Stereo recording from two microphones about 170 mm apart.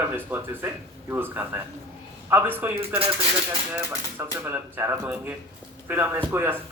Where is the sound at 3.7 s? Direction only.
15° right (ahead or behind).